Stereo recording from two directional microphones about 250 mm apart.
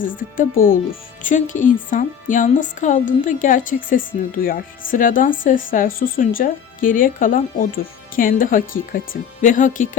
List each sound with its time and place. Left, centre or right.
0.0 s speech: left